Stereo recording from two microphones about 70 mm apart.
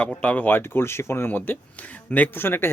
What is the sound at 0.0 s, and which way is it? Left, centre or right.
Speech, centre.